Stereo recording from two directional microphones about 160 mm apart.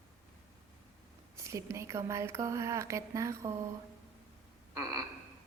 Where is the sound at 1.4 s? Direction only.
20° right (ahead or behind).